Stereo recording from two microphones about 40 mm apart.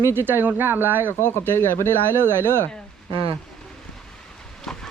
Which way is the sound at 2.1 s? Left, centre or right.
Right.